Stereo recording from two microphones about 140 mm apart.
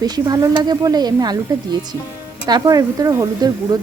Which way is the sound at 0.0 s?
25° right (ahead or behind).